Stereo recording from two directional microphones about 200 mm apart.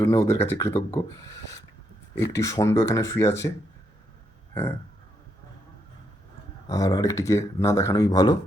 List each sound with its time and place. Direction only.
0.0 s speech: 15° left (ahead or behind)
6.7 s speech: 15° left (ahead or behind)